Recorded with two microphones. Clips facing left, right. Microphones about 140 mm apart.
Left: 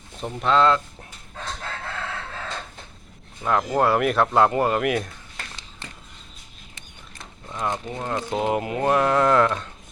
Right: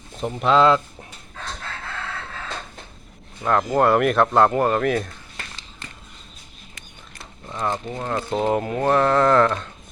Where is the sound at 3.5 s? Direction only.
5° left (ahead or behind).